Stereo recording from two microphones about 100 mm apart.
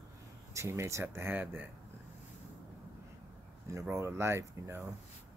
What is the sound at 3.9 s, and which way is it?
Speech, 30° right (ahead or behind).